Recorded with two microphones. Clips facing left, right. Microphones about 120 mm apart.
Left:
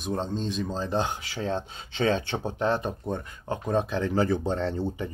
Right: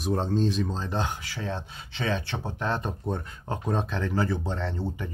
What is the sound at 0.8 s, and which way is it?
Speech, 25° left (ahead or behind).